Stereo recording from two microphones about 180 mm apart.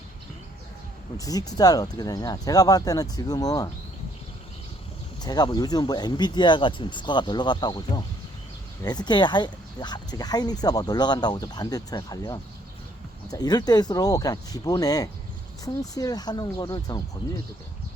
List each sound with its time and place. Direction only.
1.2 s speech: 20° left (ahead or behind)
5.2 s speech: 20° left (ahead or behind)